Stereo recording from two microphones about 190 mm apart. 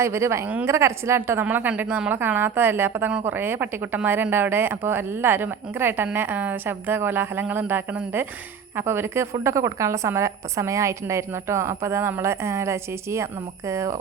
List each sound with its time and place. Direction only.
0.0 s speech: 15° right (ahead or behind)